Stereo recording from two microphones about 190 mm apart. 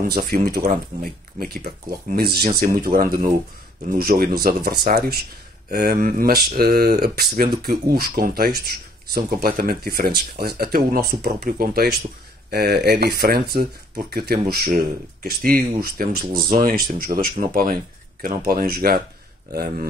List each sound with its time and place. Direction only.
0.1 s speech: 50° right (ahead or behind)